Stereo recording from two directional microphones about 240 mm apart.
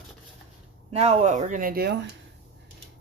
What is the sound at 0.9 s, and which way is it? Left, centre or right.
Speech, right.